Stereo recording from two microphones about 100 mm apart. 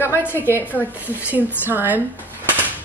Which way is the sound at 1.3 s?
20° right (ahead or behind).